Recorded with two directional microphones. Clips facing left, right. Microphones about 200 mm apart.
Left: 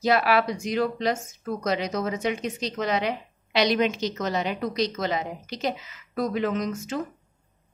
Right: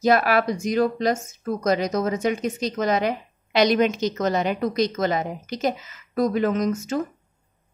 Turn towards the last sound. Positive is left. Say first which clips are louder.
# right 5 dB
turn(degrees=-45)  # may be behind; listen again after turning